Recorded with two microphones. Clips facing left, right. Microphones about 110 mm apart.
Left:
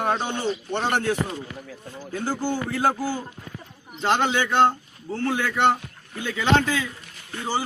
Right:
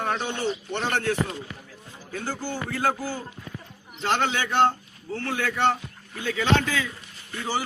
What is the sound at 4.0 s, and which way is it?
A man's voice, 25° left (ahead or behind).